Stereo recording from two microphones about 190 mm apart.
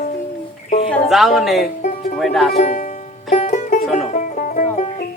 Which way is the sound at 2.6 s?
40° left (ahead or behind).